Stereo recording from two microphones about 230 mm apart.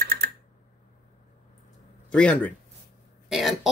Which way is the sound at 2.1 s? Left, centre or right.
Centre.